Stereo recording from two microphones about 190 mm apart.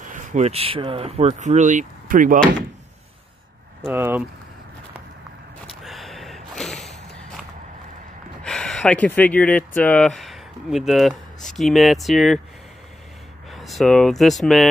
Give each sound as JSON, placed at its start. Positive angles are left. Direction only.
{"t": 0.1, "sound": "speech", "side_deg": -40}
{"t": 3.8, "sound": "speech", "side_deg": -10}
{"t": 5.7, "sound": "a sound", "side_deg": 0}
{"t": 8.5, "sound": "speech", "side_deg": 5}
{"t": 13.5, "sound": "speech", "side_deg": 0}